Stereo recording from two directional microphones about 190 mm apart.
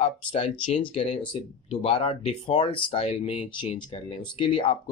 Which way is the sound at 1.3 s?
30° left (ahead or behind).